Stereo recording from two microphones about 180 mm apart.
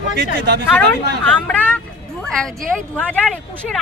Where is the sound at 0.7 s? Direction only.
10° left (ahead or behind).